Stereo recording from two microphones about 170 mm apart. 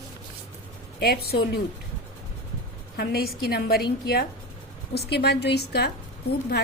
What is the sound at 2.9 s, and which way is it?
A woman's voice, 65° left (ahead or behind).